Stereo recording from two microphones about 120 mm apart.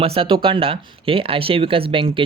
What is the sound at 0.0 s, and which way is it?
Speech, 50° right (ahead or behind).